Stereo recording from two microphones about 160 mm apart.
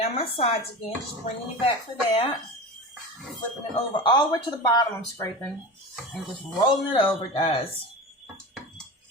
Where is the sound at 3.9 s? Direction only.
30° left (ahead or behind).